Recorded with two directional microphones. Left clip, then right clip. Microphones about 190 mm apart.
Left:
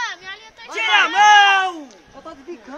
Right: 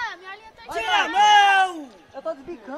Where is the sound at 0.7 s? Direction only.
35° right (ahead or behind).